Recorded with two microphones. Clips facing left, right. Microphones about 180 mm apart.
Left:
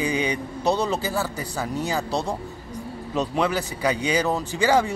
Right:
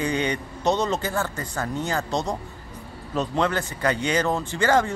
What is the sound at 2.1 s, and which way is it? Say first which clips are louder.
Speech: even; 30° left (ahead or behind).